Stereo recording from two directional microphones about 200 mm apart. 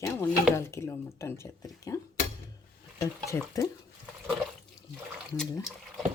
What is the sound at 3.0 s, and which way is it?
Speech, 15° left (ahead or behind).